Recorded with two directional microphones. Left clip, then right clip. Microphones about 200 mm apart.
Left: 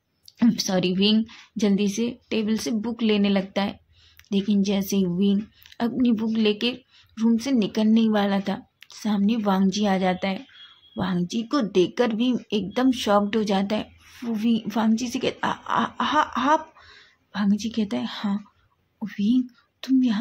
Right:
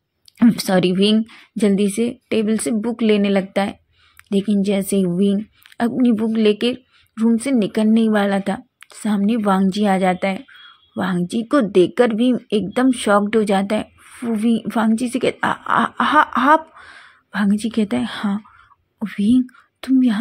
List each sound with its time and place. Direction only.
0.4 s speech: 25° right (ahead or behind)